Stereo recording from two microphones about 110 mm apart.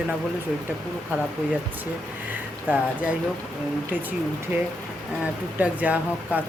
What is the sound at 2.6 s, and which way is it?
Speech, 10° right (ahead or behind).